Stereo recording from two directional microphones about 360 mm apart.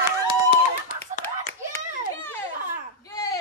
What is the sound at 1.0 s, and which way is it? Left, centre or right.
Clapping, centre.